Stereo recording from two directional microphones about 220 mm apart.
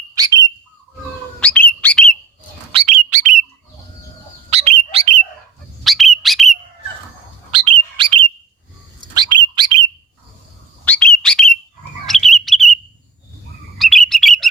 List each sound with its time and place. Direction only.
0.1 s bird: 15° right (ahead or behind)
1.4 s bird: 5° left (ahead or behind)
2.7 s bird: 30° right (ahead or behind)
4.4 s bird: 30° right (ahead or behind)
5.8 s bird: centre (ahead or behind)
7.5 s bird: 25° right (ahead or behind)
10.8 s bird: 5° left (ahead or behind)
12.0 s chirp: centre (ahead or behind)
13.7 s bird: centre (ahead or behind)